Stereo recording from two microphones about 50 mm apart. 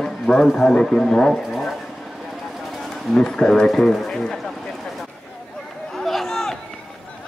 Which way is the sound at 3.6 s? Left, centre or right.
Centre.